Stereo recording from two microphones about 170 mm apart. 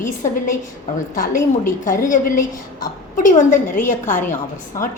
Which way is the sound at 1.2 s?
50° left (ahead or behind).